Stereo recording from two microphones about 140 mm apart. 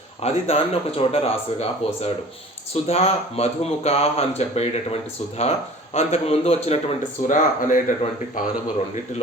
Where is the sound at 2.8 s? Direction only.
45° left (ahead or behind).